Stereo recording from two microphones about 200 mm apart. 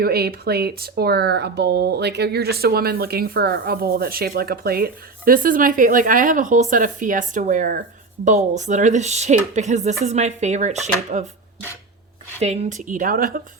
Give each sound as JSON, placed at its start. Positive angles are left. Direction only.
{"t": 0.0, "sound": "speech", "side_deg": -50}
{"t": 12.4, "sound": "speech", "side_deg": -30}